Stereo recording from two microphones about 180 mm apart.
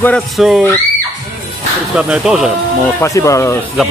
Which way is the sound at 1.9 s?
5° right (ahead or behind).